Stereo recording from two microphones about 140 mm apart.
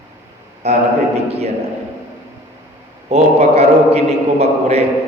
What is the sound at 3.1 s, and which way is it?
Speech, 50° right (ahead or behind).